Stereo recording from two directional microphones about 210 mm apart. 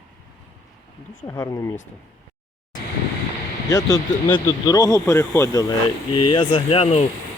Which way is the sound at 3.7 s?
15° left (ahead or behind).